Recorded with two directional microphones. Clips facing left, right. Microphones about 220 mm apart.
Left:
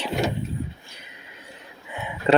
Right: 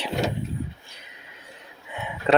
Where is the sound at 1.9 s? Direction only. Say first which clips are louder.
Left 2 dB; centre (ahead or behind).